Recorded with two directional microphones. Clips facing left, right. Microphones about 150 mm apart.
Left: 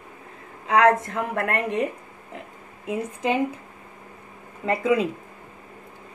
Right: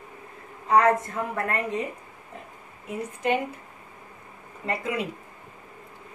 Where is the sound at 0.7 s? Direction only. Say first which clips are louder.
Left 2 dB; 80° left; by 1.9 s 65° left (ahead or behind).